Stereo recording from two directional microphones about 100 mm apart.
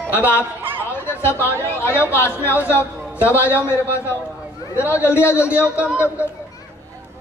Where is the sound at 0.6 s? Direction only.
20° right (ahead or behind).